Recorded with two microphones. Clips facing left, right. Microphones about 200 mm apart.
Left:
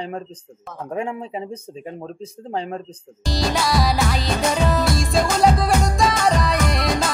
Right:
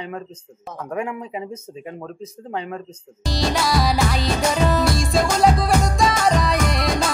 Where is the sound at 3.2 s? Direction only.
Centre (ahead or behind).